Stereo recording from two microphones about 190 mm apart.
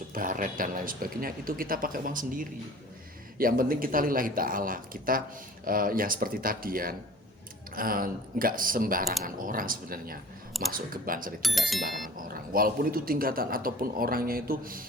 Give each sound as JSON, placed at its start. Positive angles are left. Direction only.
{"t": 0.1, "sound": "a man's voice", "side_deg": -45}
{"t": 11.9, "sound": "a sound", "side_deg": 0}
{"t": 12.1, "sound": "a man's voice", "side_deg": -50}